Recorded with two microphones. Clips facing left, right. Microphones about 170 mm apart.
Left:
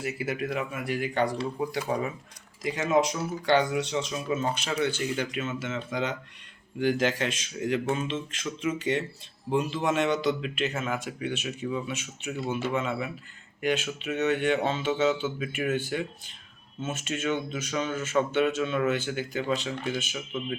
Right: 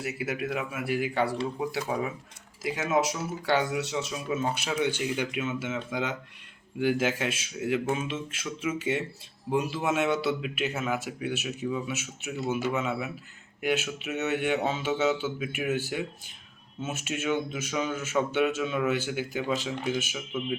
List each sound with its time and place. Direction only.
0.0 s speech: centre (ahead or behind)